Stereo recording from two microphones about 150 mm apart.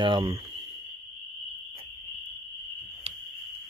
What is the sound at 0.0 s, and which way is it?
Speech, 35° right (ahead or behind).